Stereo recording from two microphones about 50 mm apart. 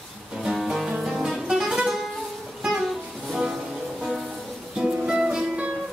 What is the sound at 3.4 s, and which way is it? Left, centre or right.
Music, centre.